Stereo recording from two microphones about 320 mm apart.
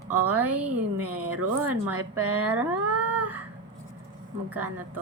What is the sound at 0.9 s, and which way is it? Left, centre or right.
Speech, right.